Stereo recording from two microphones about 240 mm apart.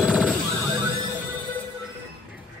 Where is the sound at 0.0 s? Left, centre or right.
Centre.